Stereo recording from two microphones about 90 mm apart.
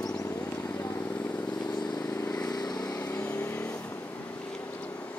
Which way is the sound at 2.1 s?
35° left (ahead or behind).